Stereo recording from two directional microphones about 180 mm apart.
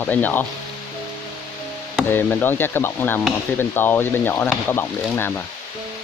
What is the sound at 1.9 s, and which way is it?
Speech, 10° left (ahead or behind).